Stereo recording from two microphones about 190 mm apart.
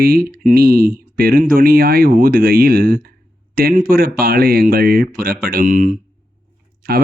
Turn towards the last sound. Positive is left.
turn(degrees=-50)  # may be behind; listen again after turning